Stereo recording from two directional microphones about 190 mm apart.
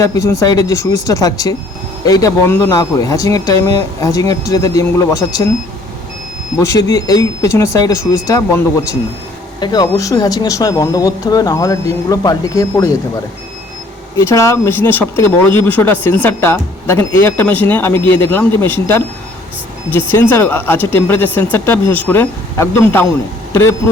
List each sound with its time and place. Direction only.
0.0 s speech: 15° left (ahead or behind)
6.6 s speech: 15° left (ahead or behind)
14.2 s speech: 15° left (ahead or behind)